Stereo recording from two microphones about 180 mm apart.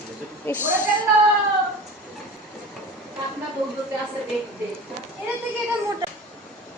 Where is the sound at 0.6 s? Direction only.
10° right (ahead or behind).